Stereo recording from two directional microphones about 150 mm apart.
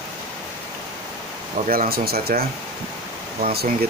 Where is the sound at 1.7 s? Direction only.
80° right.